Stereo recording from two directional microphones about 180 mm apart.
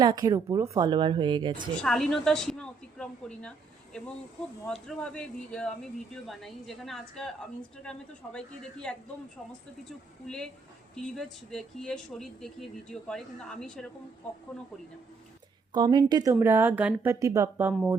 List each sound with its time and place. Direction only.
0.0 s speech: 20° right (ahead or behind)
1.7 s speech: 5° left (ahead or behind)
4.6 s speech: 5° left (ahead or behind)
10.2 s speech: 5° left (ahead or behind)
15.7 s speech: 25° right (ahead or behind)